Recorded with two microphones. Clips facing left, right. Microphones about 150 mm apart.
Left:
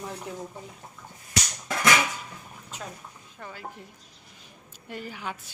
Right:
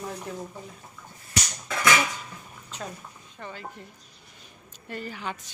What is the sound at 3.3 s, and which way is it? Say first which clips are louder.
Speech: right 1 dB; 5° left (ahead or behind).